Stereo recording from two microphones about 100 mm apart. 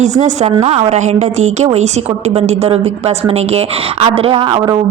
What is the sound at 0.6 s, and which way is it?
A woman's voice, 90° right.